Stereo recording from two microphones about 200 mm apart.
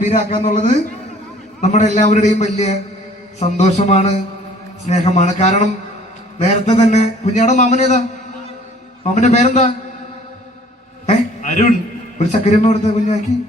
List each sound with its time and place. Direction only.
0.0 s a man's voice: 35° left (ahead or behind)
9.1 s a man's voice: 35° left (ahead or behind)
11.0 s a sound: 35° left (ahead or behind)
12.1 s a man's voice: 35° left (ahead or behind)